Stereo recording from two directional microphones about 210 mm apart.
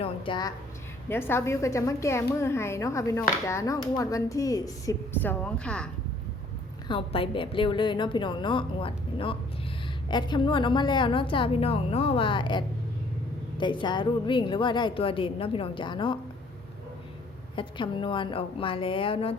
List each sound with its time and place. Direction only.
0.0 s a woman's voice: 25° left (ahead or behind)
1.0 s a woman's voice: 10° left (ahead or behind)
6.8 s a woman's voice: 25° left (ahead or behind)
17.5 s a woman's voice: 25° left (ahead or behind)